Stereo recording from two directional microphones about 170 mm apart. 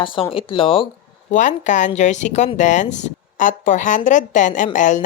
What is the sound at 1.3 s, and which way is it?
Speech, 45° left (ahead or behind).